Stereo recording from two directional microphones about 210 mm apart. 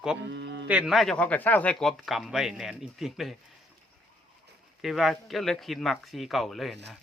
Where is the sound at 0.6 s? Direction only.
5° right (ahead or behind).